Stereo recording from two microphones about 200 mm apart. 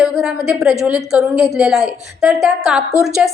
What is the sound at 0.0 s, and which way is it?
A woman's voice, 5° right (ahead or behind).